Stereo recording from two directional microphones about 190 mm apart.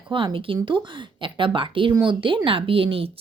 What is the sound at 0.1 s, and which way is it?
Speech, 25° right (ahead or behind).